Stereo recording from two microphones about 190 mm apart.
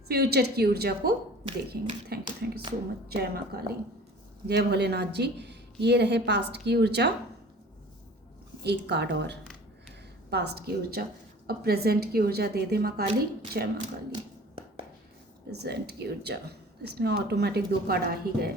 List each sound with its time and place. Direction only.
0.1 s speech: 55° right (ahead or behind)
2.2 s speech: 25° right (ahead or behind)
3.2 s speech: 55° right (ahead or behind)
8.6 s speech: 60° right (ahead or behind)
15.4 s speech: 60° right (ahead or behind)